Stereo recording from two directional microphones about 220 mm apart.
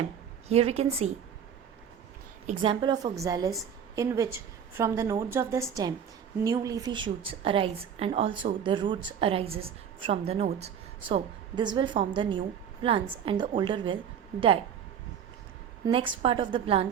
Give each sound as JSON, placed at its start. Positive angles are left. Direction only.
{"t": 0.4, "sound": "a woman's voice", "side_deg": -30}
{"t": 2.5, "sound": "a woman's voice", "side_deg": -25}
{"t": 15.8, "sound": "a woman's voice", "side_deg": -20}